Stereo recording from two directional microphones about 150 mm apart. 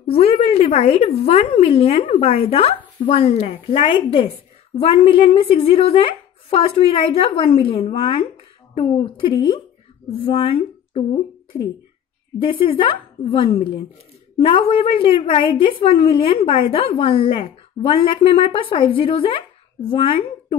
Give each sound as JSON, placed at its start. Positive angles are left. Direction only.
{"t": 0.0, "sound": "a woman's voice", "side_deg": 40}
{"t": 11.5, "sound": "a woman's voice", "side_deg": 25}